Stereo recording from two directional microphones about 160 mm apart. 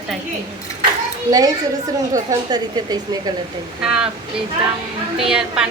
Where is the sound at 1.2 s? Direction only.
20° right (ahead or behind).